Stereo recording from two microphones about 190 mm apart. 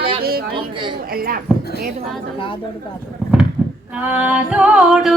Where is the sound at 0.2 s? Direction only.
55° right (ahead or behind).